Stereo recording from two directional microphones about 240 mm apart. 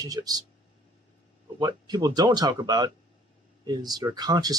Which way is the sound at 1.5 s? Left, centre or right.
Centre.